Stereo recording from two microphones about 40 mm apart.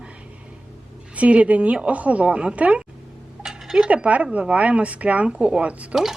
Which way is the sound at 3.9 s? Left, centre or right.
Right.